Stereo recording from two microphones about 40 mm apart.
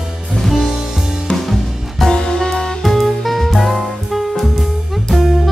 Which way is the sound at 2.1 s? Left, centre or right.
Centre.